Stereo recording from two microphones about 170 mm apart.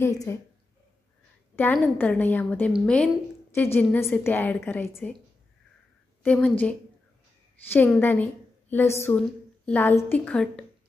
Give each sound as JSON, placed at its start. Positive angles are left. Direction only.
{"t": 0.0, "sound": "a woman's voice", "side_deg": 15}
{"t": 1.5, "sound": "a woman's voice", "side_deg": 10}
{"t": 6.2, "sound": "a woman's voice", "side_deg": 5}
{"t": 8.0, "sound": "a woman's voice", "side_deg": 10}